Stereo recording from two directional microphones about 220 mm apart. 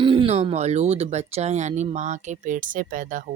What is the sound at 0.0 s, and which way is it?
Speech, 25° right (ahead or behind).